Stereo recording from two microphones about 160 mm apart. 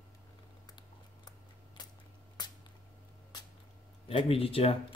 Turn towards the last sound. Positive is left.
turn(degrees=35)  # may be behind; listen again after turning